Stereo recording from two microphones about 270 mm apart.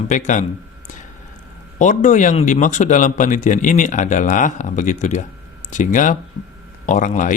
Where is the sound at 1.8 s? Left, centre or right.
Left.